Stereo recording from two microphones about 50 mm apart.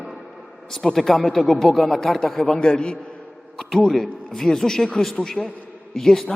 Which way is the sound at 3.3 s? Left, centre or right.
Centre.